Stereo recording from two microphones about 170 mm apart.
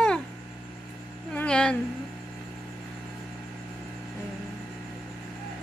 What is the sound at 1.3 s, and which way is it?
Speech, 5° left (ahead or behind).